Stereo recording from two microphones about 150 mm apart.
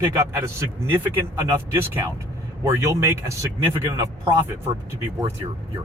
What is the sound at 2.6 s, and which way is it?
Speech, 20° right (ahead or behind).